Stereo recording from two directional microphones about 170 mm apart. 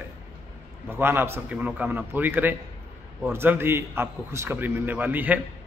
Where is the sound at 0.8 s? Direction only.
15° right (ahead or behind).